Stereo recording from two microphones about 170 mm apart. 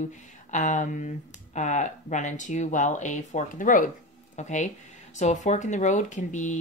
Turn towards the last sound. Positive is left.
turn(degrees=45)  # may be behind; listen again after turning